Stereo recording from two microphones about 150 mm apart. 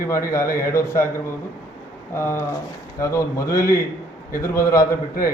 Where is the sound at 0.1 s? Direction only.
20° left (ahead or behind).